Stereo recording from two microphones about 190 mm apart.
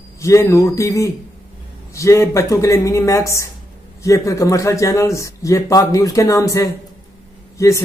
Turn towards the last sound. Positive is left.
turn(degrees=15)  # may be behind; listen again after turning